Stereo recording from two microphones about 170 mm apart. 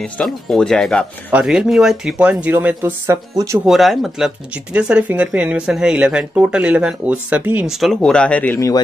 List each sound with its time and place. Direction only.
0.0 s speech: 5° left (ahead or behind); by 3.5 s 15° right (ahead or behind)
3.6 s speech: centre (ahead or behind)